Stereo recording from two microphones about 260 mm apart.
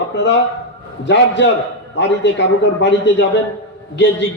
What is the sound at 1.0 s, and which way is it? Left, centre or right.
A man's voice, left.